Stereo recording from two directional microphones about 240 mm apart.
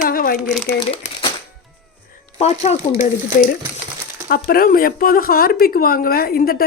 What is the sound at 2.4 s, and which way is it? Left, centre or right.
Speech, left.